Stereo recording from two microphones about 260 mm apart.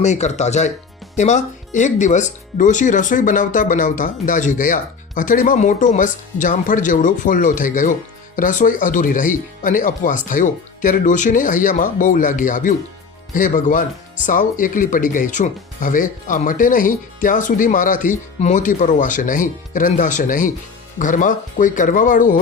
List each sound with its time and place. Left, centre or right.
0.0 s speech: left